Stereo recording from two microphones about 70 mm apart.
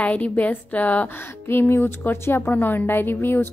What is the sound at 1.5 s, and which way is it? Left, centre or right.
A woman's voice, left.